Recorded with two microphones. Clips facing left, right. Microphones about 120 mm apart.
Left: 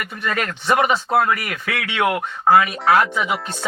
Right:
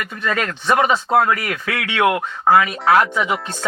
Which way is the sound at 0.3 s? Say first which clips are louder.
Right 1 dB; 25° right (ahead or behind).